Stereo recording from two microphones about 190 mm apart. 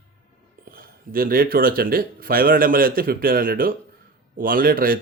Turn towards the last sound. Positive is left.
turn(degrees=-50)  # may be behind; listen again after turning